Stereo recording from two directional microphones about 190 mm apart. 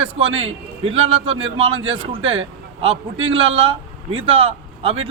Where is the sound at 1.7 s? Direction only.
90° right.